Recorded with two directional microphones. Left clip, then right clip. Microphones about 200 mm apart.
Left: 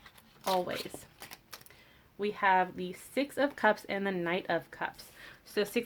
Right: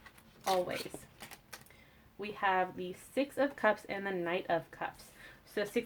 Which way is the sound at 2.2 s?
40° left (ahead or behind).